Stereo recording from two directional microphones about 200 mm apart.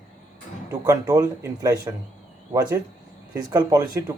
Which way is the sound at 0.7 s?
15° right (ahead or behind).